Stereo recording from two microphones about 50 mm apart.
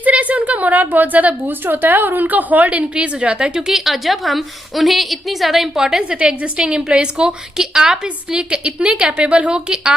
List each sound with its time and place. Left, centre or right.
0.0 s a sound: right
1.6 s a woman's voice: right
3.7 s a woman's voice: centre